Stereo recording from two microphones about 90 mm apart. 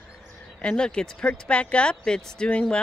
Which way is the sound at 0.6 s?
10° left (ahead or behind).